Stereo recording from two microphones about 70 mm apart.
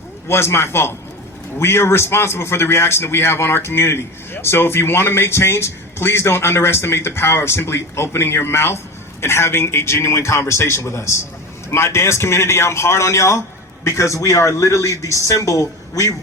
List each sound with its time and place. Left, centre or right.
0.3 s a man's voice: left